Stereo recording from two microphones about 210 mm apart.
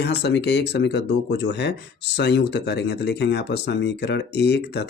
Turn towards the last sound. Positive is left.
turn(degrees=55)  # may be behind; listen again after turning